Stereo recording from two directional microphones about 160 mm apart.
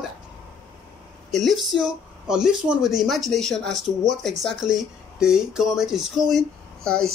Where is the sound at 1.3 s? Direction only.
Centre (ahead or behind).